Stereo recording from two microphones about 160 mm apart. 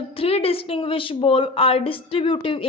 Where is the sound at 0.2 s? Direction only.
40° left (ahead or behind).